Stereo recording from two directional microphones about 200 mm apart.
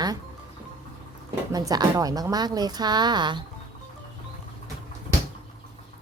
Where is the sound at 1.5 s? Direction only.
20° right (ahead or behind).